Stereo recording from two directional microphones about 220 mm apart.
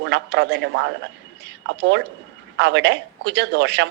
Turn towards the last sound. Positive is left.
turn(degrees=-50)  # may be behind; listen again after turning